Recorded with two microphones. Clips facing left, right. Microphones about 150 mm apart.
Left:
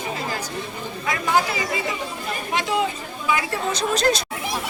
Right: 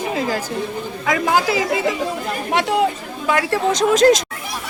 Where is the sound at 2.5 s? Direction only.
70° right (ahead or behind); by 4.2 s 90° right.